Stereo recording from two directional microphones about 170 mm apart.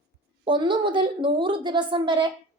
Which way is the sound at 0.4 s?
30° right (ahead or behind).